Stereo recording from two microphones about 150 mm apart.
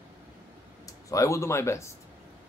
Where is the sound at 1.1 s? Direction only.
20° left (ahead or behind).